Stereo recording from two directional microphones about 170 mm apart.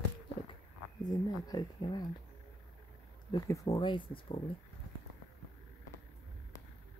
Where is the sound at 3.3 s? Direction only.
20° left (ahead or behind).